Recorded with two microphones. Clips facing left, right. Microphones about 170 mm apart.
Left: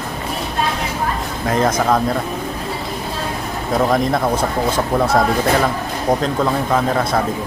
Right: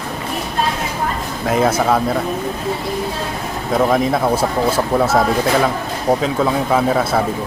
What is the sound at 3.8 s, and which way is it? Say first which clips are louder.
Speech: right 1 dB; 5° right (ahead or behind).